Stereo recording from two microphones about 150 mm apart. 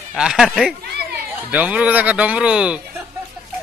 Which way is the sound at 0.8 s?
90° right.